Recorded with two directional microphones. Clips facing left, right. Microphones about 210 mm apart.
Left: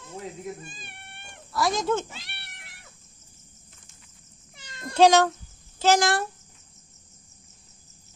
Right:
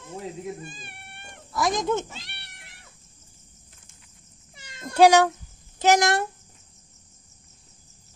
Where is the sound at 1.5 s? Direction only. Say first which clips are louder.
Even; 20° right (ahead or behind).